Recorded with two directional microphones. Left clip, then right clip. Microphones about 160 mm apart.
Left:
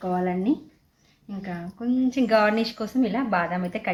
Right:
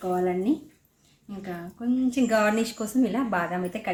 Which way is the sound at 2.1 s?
10° right (ahead or behind).